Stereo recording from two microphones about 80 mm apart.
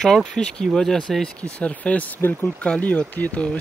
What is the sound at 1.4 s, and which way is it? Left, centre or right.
Speech, centre.